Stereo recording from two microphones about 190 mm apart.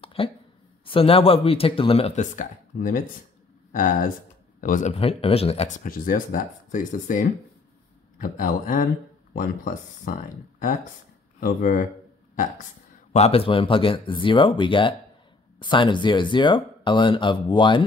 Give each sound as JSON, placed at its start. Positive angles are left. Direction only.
{"t": 0.0, "sound": "a sound", "side_deg": 30}
{"t": 0.8, "sound": "speech", "side_deg": 30}
{"t": 4.6, "sound": "speech", "side_deg": 45}
{"t": 5.9, "sound": "speech", "side_deg": 45}
{"t": 8.2, "sound": "speech", "side_deg": 45}
{"t": 11.3, "sound": "speech", "side_deg": 45}
{"t": 13.1, "sound": "speech", "side_deg": 30}